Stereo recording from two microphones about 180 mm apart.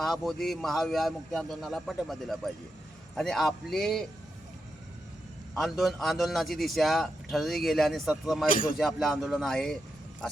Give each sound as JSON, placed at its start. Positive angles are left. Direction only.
{"t": 0.0, "sound": "a man's voice", "side_deg": 0}
{"t": 5.5, "sound": "a man's voice", "side_deg": 0}
{"t": 8.4, "sound": "speech", "side_deg": 50}
{"t": 8.8, "sound": "a man's voice", "side_deg": 0}